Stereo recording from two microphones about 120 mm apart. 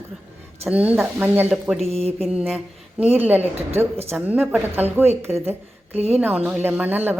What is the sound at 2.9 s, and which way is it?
A woman's voice, 15° right (ahead or behind).